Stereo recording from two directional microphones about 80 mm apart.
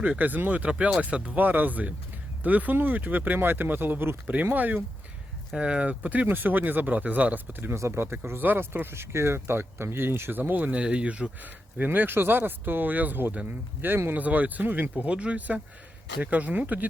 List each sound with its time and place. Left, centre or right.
0.0 s speech: right